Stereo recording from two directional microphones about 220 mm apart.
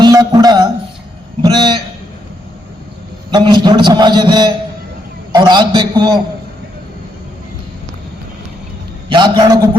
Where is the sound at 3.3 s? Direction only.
20° right (ahead or behind).